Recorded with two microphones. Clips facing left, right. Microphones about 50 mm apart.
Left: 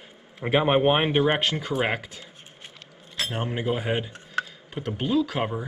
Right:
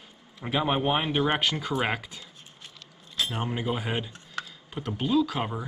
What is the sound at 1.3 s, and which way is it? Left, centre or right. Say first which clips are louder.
Speech: left 2 dB; centre.